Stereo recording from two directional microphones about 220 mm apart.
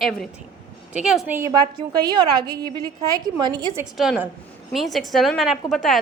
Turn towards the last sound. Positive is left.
turn(degrees=0)  # may be behind; listen again after turning